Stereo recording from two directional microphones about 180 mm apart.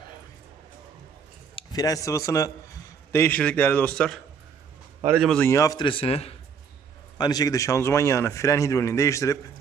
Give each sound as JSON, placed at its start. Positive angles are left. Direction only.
{"t": 1.5, "sound": "a man's voice", "side_deg": 20}
{"t": 5.0, "sound": "speech", "side_deg": -5}
{"t": 5.3, "sound": "a man's voice", "side_deg": 10}
{"t": 7.2, "sound": "speech", "side_deg": 20}